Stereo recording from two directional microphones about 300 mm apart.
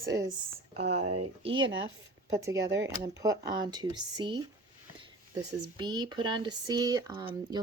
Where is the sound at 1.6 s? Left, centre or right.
Right.